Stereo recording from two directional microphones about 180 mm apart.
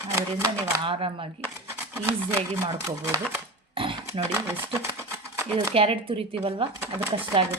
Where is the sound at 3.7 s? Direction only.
30° right (ahead or behind).